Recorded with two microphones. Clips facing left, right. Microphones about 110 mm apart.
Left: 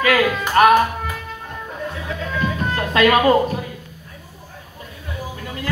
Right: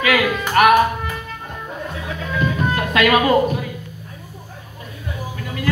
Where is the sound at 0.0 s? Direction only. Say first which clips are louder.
Left 1 dB; 40° left (ahead or behind).